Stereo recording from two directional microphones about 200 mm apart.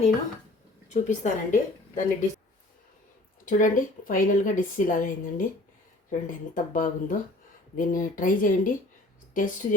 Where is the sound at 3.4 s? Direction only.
40° left (ahead or behind).